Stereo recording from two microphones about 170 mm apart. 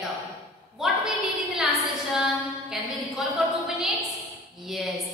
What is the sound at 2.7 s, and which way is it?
A woman's voice, 5° right (ahead or behind).